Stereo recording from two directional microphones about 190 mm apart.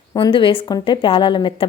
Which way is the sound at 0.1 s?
25° left (ahead or behind).